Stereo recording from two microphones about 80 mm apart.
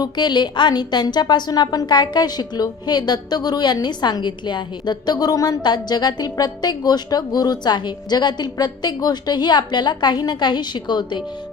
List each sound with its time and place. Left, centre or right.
0.0 s a woman's voice: left